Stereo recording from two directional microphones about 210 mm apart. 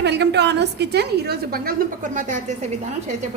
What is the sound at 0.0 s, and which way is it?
A woman's voice, 55° right (ahead or behind).